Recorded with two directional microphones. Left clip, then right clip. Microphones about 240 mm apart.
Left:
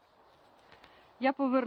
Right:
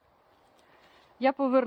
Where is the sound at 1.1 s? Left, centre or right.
Right.